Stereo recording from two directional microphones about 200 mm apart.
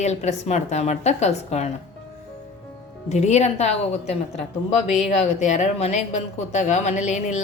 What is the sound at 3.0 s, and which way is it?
Speech, 35° left (ahead or behind).